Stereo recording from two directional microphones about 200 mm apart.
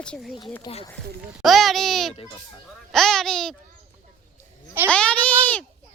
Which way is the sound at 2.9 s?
Centre (ahead or behind).